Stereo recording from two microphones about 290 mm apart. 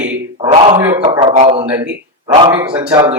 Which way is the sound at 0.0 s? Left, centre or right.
Centre.